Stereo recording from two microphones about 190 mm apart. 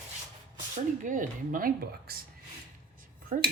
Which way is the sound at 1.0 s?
45° right (ahead or behind).